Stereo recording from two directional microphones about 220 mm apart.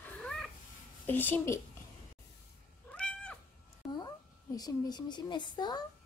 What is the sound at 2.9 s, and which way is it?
Cat, 5° left (ahead or behind).